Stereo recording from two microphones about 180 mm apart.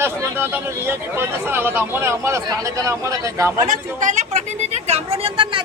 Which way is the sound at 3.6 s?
45° right (ahead or behind).